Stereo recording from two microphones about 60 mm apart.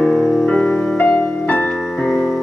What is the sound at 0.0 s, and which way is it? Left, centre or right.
Music, centre.